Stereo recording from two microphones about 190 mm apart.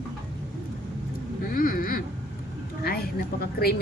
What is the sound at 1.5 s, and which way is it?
Duck, 45° left (ahead or behind).